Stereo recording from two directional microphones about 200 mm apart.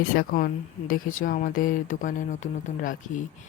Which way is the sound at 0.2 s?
45° left (ahead or behind).